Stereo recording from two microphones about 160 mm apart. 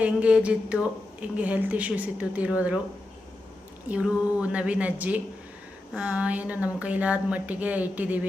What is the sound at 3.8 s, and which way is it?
Speech, 5° right (ahead or behind).